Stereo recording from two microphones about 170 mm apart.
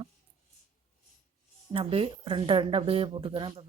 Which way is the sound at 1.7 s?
35° right (ahead or behind).